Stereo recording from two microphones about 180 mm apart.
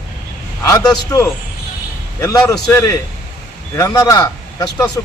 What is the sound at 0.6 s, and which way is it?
A man's voice, 20° left (ahead or behind).